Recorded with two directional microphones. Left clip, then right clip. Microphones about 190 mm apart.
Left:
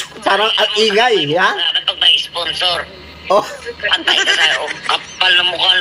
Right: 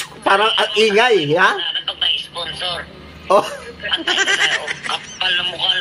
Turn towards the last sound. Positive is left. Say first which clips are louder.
# left 6 dB
turn(degrees=35)  # may be behind; listen again after turning